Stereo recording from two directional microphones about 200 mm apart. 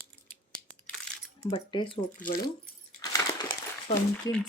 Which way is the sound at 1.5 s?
25° left (ahead or behind).